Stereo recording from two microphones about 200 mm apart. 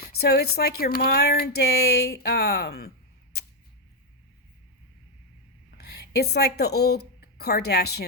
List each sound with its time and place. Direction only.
0.0 s speech: 50° left (ahead or behind)
5.7 s speech: 55° left (ahead or behind)